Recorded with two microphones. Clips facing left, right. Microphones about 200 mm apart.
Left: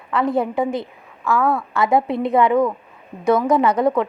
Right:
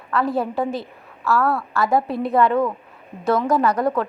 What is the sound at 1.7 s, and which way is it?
Speech, 20° left (ahead or behind).